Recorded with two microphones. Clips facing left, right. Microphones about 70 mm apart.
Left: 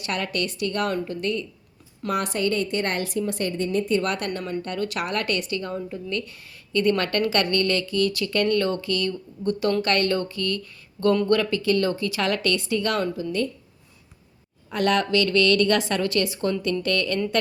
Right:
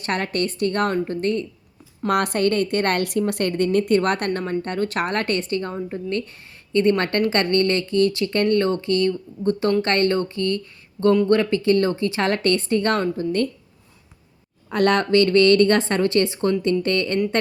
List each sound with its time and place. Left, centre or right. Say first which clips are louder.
0.0 s speech: right 4 dB; right
2.0 s a woman's voice: right 5 dB; right
14.7 s speech: right 4 dB; right